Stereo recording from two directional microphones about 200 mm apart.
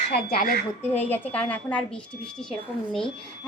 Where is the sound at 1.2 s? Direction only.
5° left (ahead or behind).